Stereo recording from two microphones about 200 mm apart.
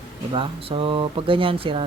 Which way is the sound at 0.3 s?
25° right (ahead or behind).